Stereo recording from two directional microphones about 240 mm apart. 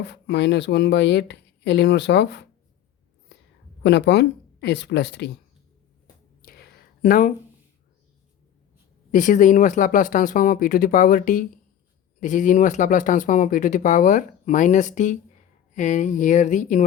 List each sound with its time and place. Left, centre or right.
0.0 s speech: left
3.8 s speech: left
6.4 s a sound: left
9.1 s speech: left